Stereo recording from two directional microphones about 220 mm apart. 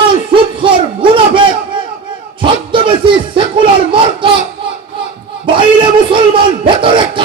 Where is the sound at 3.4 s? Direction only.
20° right (ahead or behind).